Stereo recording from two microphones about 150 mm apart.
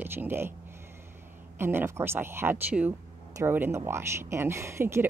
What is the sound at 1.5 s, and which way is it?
Speech, 15° right (ahead or behind).